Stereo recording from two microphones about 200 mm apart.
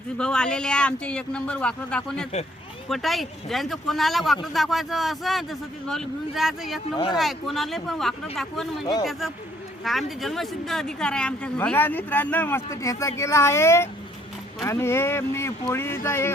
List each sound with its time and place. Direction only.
0.2 s a man's voice: 5° left (ahead or behind)
6.9 s speech: 20° left (ahead or behind)
7.2 s a man's voice: centre (ahead or behind)
9.8 s speech: centre (ahead or behind)